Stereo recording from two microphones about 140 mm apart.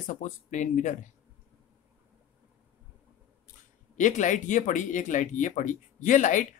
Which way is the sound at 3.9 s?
65° left (ahead or behind).